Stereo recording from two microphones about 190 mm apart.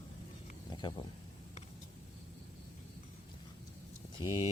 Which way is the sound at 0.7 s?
20° left (ahead or behind).